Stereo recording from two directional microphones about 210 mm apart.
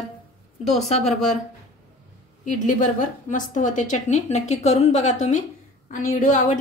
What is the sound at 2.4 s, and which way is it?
A woman's voice, 40° left (ahead or behind).